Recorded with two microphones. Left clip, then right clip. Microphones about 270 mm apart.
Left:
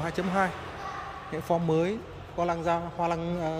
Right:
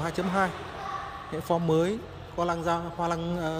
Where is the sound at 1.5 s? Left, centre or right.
Centre.